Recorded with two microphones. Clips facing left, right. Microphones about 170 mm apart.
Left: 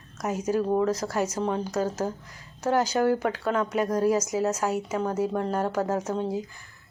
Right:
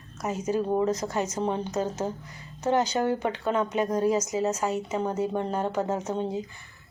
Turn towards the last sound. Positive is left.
turn(degrees=0)  # may be behind; listen again after turning